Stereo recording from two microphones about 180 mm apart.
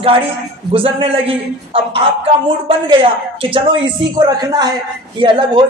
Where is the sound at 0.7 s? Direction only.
30° right (ahead or behind).